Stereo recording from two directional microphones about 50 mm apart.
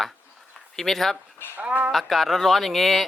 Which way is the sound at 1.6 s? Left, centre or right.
Right.